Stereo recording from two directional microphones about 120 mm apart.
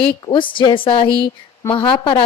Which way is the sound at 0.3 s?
40° left (ahead or behind).